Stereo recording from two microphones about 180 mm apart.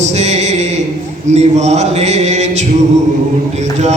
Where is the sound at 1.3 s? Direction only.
40° right (ahead or behind).